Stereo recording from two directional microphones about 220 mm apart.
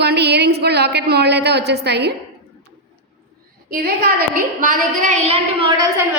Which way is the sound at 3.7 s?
45° right (ahead or behind).